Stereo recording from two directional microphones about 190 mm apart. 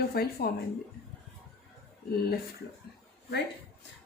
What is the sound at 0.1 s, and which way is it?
Speech, 55° left (ahead or behind).